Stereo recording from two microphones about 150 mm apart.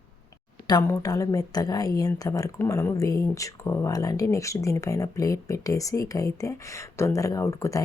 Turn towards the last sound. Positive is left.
turn(degrees=20)  # may be behind; listen again after turning